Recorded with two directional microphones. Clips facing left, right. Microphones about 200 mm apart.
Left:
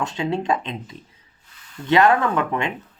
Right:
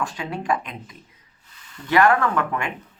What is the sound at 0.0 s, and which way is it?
Speech, 25° left (ahead or behind).